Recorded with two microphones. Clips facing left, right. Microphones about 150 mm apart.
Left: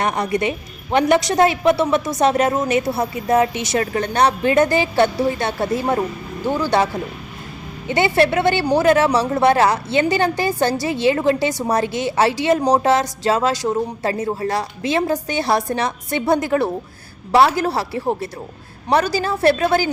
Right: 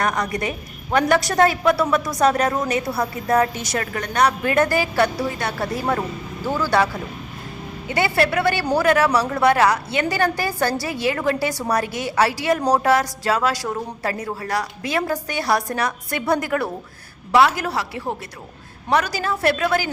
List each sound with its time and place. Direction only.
0.0 s a woman's voice: 25° left (ahead or behind)